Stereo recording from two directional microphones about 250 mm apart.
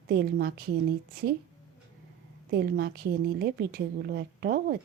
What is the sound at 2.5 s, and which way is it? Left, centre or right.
A woman's voice, right.